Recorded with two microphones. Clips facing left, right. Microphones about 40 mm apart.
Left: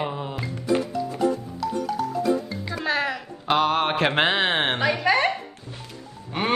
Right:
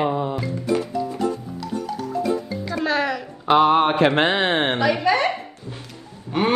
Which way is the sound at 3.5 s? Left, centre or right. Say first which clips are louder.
Right 5 dB; centre.